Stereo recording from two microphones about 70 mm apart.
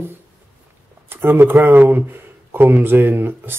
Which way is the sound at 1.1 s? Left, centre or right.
Right.